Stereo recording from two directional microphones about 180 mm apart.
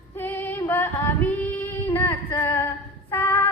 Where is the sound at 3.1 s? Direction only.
15° left (ahead or behind).